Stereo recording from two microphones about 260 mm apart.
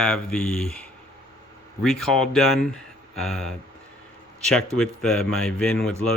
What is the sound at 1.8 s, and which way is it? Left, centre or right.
Speech, centre.